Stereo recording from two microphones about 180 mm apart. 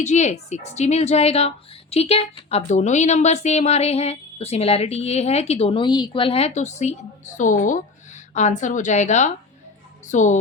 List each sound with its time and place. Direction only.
0.0 s a woman's voice: 40° left (ahead or behind)